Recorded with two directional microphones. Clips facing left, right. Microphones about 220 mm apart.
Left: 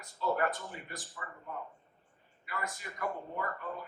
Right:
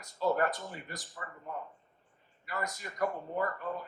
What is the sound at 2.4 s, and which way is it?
Speech, 40° right (ahead or behind).